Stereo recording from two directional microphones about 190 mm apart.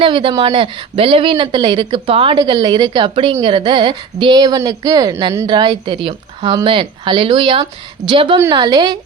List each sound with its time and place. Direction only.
0.0 s speech: 25° right (ahead or behind)